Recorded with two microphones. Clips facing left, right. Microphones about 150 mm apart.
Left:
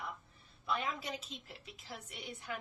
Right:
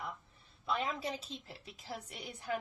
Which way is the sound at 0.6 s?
30° right (ahead or behind).